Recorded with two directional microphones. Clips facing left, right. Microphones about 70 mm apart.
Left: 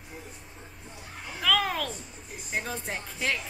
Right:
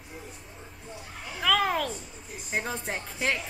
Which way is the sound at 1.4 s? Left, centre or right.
Centre.